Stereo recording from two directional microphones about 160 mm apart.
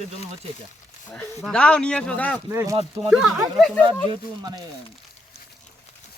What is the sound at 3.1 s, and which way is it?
Speech, 5° right (ahead or behind).